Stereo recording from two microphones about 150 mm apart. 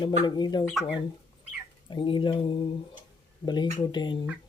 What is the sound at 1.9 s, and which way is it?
Mantra, 30° left (ahead or behind).